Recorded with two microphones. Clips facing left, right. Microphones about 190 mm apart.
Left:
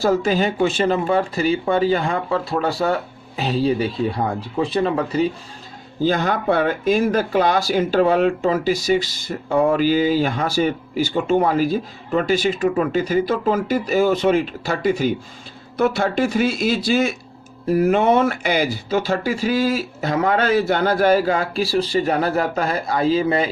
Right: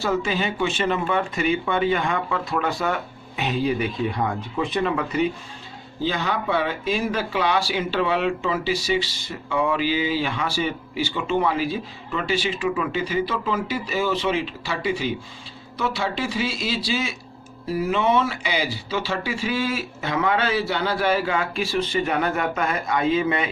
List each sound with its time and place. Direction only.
0.0 s speech: 40° left (ahead or behind)
6.0 s speech: 45° left (ahead or behind)